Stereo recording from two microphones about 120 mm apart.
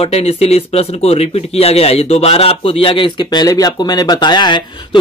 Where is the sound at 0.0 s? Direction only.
55° left (ahead or behind).